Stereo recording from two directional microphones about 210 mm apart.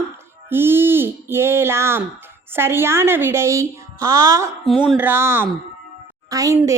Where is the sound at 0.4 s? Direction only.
10° right (ahead or behind).